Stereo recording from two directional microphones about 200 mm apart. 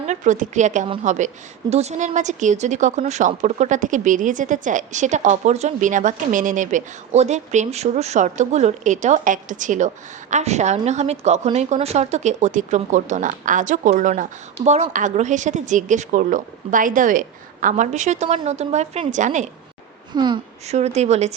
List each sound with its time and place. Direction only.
0.0 s speech: 35° right (ahead or behind)
20.1 s a woman's voice: 20° right (ahead or behind)
20.7 s speech: 35° right (ahead or behind)